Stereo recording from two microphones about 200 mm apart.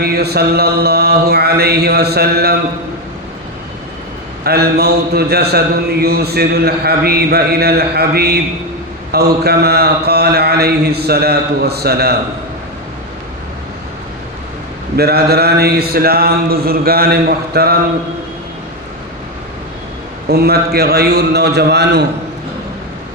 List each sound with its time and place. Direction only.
0.0 s speech: 50° right (ahead or behind)
4.4 s speech: 50° right (ahead or behind)
14.9 s speech: 50° right (ahead or behind)
20.2 s speech: 55° right (ahead or behind)